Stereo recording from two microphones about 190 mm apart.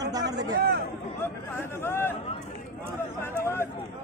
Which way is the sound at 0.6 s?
55° right (ahead or behind).